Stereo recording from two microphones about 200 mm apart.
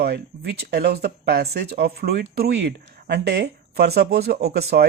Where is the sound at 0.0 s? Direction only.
55° right (ahead or behind).